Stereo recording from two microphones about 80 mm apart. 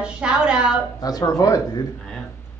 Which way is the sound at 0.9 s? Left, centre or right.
Left.